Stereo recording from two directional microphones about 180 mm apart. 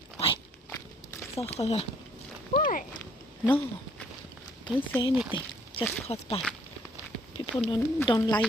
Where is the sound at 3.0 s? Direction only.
10° left (ahead or behind).